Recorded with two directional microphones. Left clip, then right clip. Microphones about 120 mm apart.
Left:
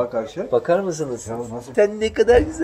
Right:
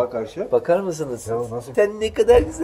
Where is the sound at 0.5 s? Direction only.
10° left (ahead or behind).